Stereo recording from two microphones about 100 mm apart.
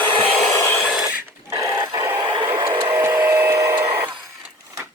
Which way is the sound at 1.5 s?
30° right (ahead or behind).